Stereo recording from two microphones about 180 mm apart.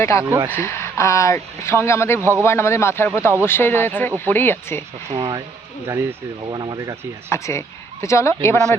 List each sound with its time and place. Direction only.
0.0 s speech: 15° left (ahead or behind)
0.3 s speech: 15° right (ahead or behind)
0.5 s speech: 15° left (ahead or behind)
5.1 s speech: 25° right (ahead or behind)
7.3 s speech: 15° left (ahead or behind)